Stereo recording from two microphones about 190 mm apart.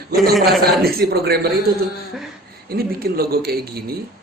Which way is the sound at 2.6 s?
55° right (ahead or behind).